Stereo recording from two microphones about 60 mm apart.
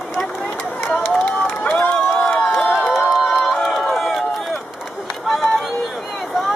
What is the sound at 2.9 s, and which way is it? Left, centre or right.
Run, centre.